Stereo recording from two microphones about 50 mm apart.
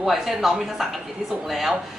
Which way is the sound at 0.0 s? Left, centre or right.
Centre.